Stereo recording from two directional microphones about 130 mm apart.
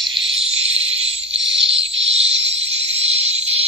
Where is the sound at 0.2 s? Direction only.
45° right (ahead or behind).